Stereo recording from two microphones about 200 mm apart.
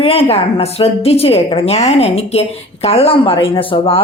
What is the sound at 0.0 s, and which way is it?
A woman's voice, 30° left (ahead or behind).